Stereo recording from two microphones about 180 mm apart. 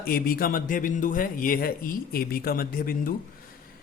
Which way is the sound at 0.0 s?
55° left (ahead or behind).